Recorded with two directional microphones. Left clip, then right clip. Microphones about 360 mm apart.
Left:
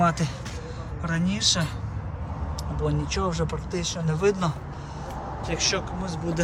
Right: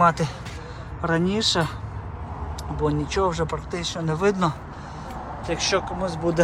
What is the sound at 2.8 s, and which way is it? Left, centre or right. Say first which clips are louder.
Speech: right 5 dB; centre.